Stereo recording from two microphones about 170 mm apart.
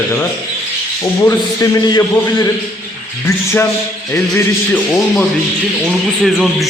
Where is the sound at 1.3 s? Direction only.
20° left (ahead or behind).